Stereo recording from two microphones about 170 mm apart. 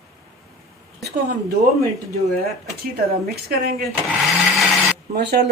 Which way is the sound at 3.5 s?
65° right (ahead or behind).